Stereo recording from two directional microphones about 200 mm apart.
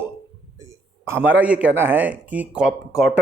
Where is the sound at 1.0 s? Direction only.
10° right (ahead or behind).